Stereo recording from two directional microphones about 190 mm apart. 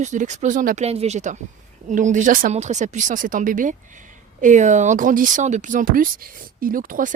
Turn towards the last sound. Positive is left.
turn(degrees=-45)  # may be behind; listen again after turning